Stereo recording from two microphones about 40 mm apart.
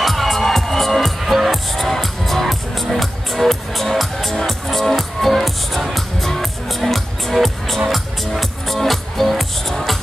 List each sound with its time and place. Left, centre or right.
0.0 s music: centre